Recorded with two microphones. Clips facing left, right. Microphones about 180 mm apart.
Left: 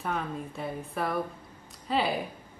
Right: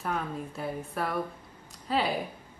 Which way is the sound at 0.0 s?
Centre (ahead or behind).